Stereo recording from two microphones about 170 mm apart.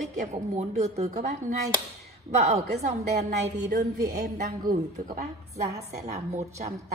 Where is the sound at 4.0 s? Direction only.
55° right (ahead or behind).